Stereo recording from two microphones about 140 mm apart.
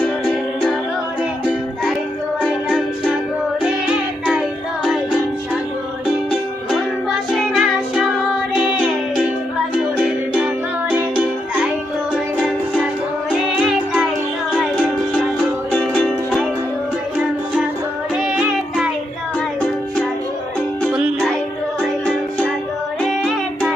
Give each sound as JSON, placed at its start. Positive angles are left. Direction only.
{"t": 2.7, "sound": "music", "side_deg": 5}
{"t": 4.3, "sound": "music", "side_deg": 0}
{"t": 6.3, "sound": "music", "side_deg": 0}
{"t": 9.7, "sound": "music", "side_deg": -10}
{"t": 13.6, "sound": "music", "side_deg": -5}
{"t": 15.9, "sound": "music", "side_deg": -5}
{"t": 18.2, "sound": "music", "side_deg": -5}
{"t": 20.9, "sound": "music", "side_deg": -5}